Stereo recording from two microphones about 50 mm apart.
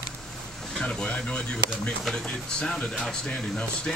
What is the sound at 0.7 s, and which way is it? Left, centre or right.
Speech, centre.